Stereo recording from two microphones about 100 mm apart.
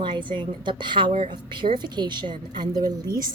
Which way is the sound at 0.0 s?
55° right (ahead or behind).